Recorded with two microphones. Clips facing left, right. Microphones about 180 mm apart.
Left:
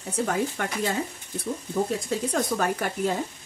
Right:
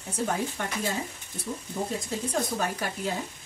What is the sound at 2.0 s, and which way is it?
Speech, 65° left (ahead or behind).